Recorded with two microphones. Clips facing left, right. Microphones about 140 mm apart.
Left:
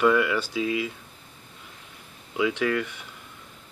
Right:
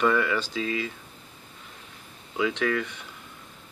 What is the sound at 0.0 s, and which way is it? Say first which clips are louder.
Speech: left 2 dB; 5° left (ahead or behind).